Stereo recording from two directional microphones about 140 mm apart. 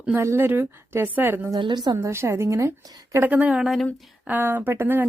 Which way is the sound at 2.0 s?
20° right (ahead or behind).